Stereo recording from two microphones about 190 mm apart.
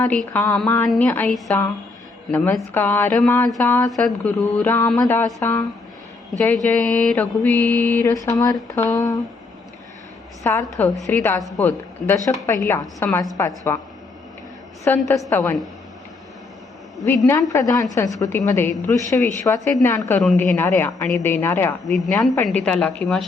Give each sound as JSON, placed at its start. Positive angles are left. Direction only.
{"t": 0.0, "sound": "a woman's voice", "side_deg": 10}
{"t": 10.4, "sound": "a woman's voice", "side_deg": 10}
{"t": 14.9, "sound": "a woman's voice", "side_deg": 10}
{"t": 17.5, "sound": "a woman's voice", "side_deg": 15}
{"t": 21.8, "sound": "a woman's voice", "side_deg": 0}